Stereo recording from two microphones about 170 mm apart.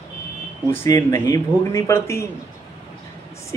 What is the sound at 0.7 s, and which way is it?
A man's voice, 15° left (ahead or behind).